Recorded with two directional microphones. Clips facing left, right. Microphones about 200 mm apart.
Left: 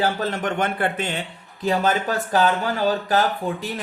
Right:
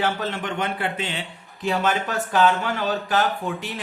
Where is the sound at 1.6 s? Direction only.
35° left (ahead or behind).